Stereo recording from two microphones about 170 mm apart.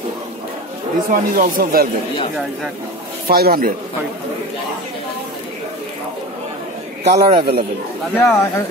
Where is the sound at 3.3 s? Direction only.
60° right (ahead or behind).